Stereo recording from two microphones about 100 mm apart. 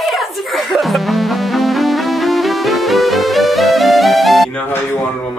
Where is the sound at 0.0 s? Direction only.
Centre (ahead or behind).